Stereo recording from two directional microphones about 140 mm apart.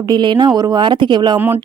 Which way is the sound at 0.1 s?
35° right (ahead or behind).